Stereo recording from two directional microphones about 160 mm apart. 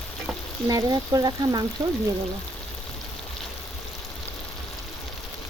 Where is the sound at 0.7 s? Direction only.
25° right (ahead or behind).